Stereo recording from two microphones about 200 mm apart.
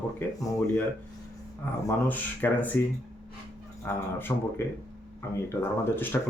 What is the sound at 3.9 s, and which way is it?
A man's voice, 10° left (ahead or behind).